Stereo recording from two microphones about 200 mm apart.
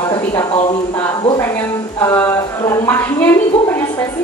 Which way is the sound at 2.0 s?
15° left (ahead or behind).